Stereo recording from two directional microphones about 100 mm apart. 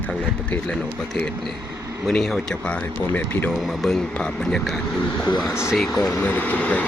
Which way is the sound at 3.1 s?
20° left (ahead or behind).